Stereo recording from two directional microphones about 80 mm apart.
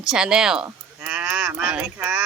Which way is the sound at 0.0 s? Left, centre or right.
Centre.